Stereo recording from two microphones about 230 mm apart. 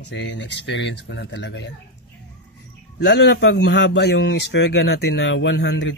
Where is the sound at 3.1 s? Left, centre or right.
Left.